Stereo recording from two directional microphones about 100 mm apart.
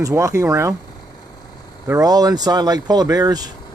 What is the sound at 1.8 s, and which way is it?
Speech, 35° right (ahead or behind).